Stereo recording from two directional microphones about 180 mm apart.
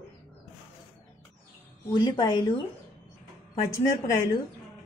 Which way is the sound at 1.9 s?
25° left (ahead or behind).